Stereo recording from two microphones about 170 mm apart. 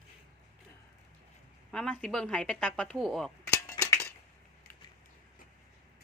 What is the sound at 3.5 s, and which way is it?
Cutlery, 15° left (ahead or behind).